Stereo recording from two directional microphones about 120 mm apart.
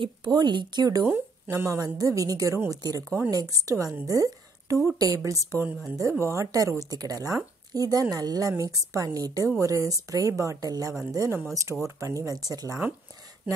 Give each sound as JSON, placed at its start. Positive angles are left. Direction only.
{"t": 0.0, "sound": "speech", "side_deg": -35}
{"t": 1.0, "sound": "speech", "side_deg": -20}